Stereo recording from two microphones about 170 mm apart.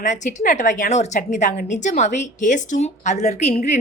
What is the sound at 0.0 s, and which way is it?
A woman's voice, 45° left (ahead or behind).